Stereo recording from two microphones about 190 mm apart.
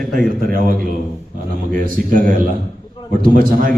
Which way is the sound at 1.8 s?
45° right (ahead or behind).